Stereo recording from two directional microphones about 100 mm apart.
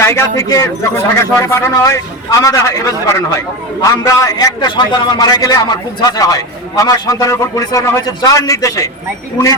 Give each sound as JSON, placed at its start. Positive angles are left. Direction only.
{"t": 0.1, "sound": "speech", "side_deg": 30}